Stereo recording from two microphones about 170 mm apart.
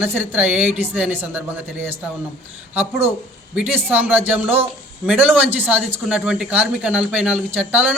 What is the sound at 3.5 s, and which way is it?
A man's voice, 10° right (ahead or behind).